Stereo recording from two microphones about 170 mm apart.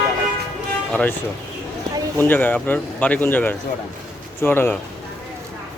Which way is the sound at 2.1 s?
10° left (ahead or behind).